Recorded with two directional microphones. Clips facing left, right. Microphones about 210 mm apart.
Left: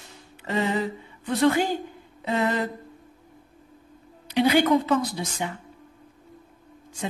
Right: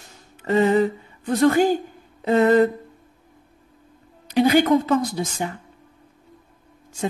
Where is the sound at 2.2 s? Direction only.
45° right (ahead or behind).